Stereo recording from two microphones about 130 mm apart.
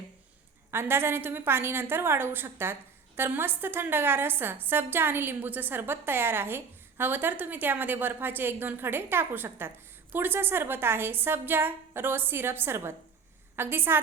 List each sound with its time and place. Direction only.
0.7 s a woman's voice: 20° right (ahead or behind)